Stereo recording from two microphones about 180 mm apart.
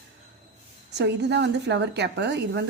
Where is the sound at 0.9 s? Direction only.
70° right (ahead or behind).